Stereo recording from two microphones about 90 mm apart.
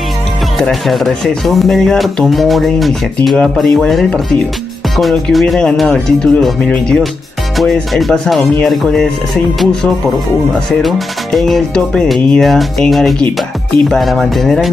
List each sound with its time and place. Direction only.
0.6 s speech: centre (ahead or behind)
10.7 s speech: centre (ahead or behind)